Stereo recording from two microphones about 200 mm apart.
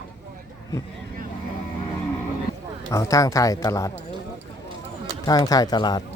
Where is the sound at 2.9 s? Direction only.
15° left (ahead or behind).